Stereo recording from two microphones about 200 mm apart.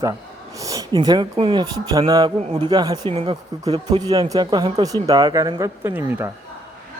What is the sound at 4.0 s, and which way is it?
Speech, 20° right (ahead or behind).